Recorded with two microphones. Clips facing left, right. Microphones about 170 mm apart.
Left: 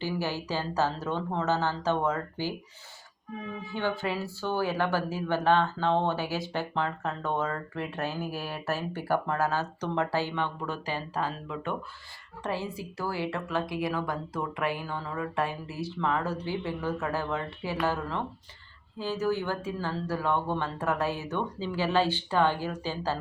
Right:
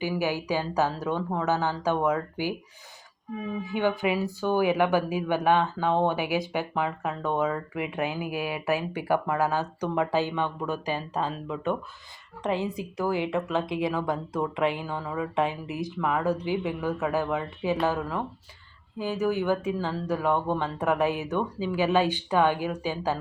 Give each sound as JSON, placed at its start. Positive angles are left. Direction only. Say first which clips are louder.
{"t": 0.0, "sound": "speech", "louder": "right 4 dB", "side_deg": -15}
{"t": 3.7, "sound": "speech", "louder": "right 5 dB", "side_deg": -15}
{"t": 18.9, "sound": "speech", "louder": "right 2 dB", "side_deg": -15}